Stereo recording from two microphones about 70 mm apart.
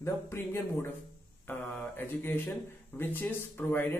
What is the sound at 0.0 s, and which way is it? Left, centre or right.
A man's voice, left.